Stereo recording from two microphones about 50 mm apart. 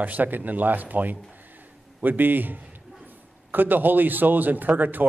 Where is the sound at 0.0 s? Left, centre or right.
Right.